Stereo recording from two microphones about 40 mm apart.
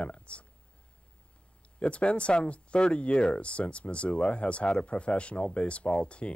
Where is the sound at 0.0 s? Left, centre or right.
Left.